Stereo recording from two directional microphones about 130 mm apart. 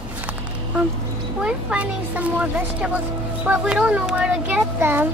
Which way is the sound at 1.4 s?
10° right (ahead or behind).